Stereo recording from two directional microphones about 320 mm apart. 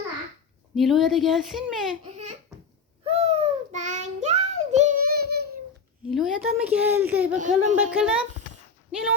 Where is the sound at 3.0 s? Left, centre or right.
Centre.